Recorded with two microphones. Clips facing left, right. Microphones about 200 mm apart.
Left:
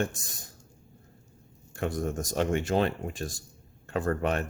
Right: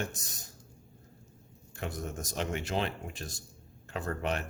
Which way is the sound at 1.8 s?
50° left (ahead or behind).